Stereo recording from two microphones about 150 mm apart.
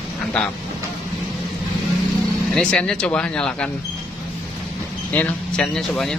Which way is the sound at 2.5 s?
5° left (ahead or behind).